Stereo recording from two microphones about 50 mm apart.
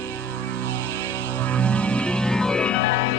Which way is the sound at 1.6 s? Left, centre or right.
Left.